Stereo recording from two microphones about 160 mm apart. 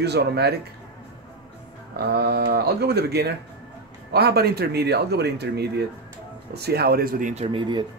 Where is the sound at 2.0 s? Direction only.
90° right; by 7.4 s 55° right (ahead or behind).